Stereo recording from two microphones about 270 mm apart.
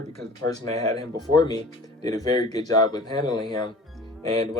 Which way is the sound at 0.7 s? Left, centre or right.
Centre.